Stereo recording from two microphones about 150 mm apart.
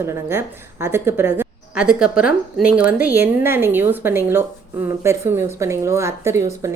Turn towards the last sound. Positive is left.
turn(degrees=-20)  # may be behind; listen again after turning